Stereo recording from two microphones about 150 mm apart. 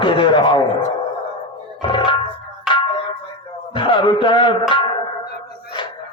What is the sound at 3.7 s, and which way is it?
Speech, 35° left (ahead or behind).